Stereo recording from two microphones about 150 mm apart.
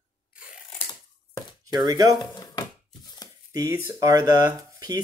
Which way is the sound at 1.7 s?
25° right (ahead or behind).